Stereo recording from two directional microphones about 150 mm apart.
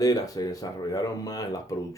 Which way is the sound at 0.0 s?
25° left (ahead or behind).